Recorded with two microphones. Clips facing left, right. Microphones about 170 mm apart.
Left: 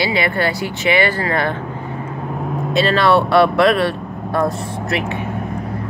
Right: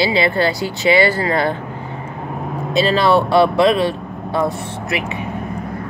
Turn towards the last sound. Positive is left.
turn(degrees=0)  # may be behind; listen again after turning